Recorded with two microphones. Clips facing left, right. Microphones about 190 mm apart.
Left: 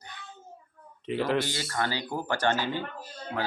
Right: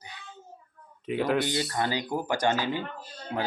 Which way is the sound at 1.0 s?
5° right (ahead or behind).